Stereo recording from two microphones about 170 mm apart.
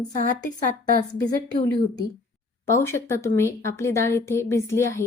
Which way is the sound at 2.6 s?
15° left (ahead or behind).